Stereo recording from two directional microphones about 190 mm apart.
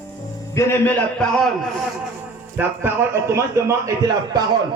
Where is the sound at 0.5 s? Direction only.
10° left (ahead or behind).